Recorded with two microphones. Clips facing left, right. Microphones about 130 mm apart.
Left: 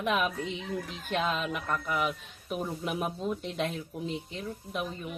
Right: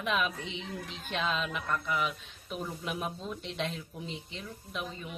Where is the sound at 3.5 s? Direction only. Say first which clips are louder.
Left 3 dB; 45° left (ahead or behind).